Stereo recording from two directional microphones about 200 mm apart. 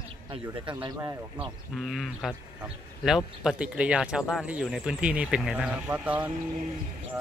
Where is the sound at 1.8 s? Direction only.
Centre (ahead or behind).